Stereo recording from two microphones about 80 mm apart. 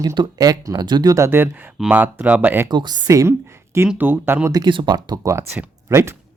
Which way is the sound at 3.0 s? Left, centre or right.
Right.